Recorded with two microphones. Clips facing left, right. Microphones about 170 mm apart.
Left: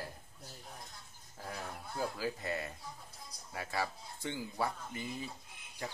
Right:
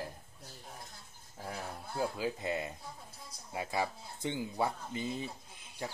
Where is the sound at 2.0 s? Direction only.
20° right (ahead or behind).